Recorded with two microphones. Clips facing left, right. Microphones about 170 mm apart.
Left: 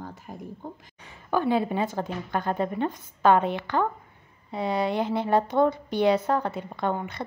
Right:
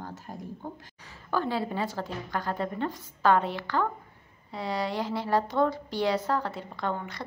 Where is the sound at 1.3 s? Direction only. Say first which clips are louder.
Left 5 dB; 20° left (ahead or behind).